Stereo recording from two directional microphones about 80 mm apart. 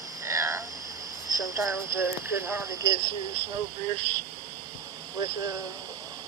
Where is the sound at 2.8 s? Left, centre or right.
Right.